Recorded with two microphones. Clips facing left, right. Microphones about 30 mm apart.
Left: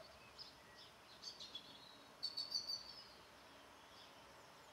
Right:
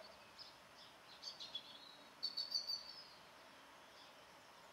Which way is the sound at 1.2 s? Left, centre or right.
Centre.